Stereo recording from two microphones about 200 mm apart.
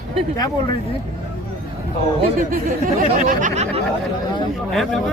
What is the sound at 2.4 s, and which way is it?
Speech, 40° right (ahead or behind).